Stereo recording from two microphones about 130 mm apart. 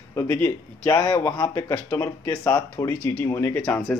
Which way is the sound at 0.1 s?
20° left (ahead or behind).